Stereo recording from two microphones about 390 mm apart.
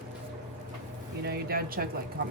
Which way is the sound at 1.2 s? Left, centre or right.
Right.